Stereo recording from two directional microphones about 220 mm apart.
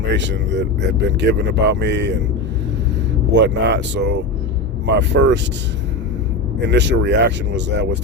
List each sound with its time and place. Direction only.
0.1 s speech: 55° right (ahead or behind)
3.3 s speech: 55° right (ahead or behind)
6.6 s speech: 55° right (ahead or behind)